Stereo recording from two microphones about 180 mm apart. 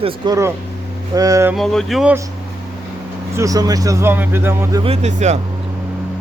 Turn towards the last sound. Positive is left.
turn(degrees=-40)  # may be behind; listen again after turning